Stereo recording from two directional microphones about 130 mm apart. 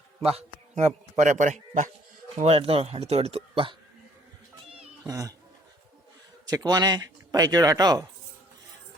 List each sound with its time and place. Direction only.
0.2 s a man's voice: 50° right (ahead or behind); by 1.9 s 70° right (ahead or behind)
2.4 s speech: 45° right (ahead or behind)
5.0 s speech: 25° right (ahead or behind)
6.4 s speech: 30° right (ahead or behind)